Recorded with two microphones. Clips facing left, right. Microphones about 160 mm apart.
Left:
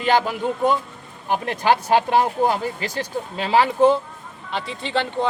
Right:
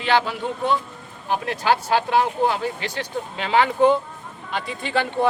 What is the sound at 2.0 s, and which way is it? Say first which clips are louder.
Speech: left 1 dB; 45° left (ahead or behind).